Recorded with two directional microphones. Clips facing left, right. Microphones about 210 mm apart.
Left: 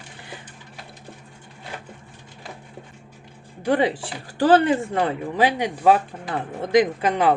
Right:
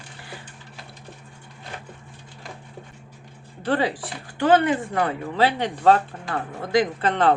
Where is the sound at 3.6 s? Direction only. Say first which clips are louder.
Left 3 dB; 15° left (ahead or behind).